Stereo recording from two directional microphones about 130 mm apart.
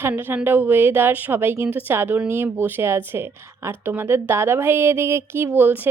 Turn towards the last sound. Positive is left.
turn(degrees=-15)  # may be behind; listen again after turning